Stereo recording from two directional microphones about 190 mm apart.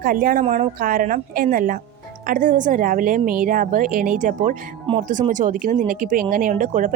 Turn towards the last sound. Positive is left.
turn(degrees=-45)  # may be behind; listen again after turning